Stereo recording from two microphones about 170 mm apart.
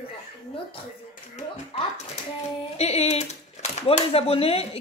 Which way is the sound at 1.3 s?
40° left (ahead or behind).